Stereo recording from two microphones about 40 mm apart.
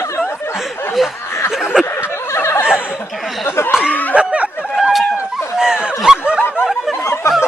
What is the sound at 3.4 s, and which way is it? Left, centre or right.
Speech, left.